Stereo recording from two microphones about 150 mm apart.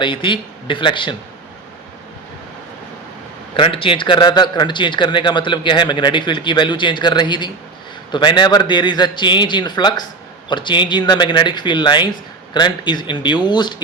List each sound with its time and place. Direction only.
0.0 s a man's voice: 35° left (ahead or behind)
3.5 s a man's voice: 35° left (ahead or behind)